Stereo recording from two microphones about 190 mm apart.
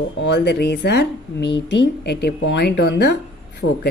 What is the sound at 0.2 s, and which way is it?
Speech, 60° left (ahead or behind).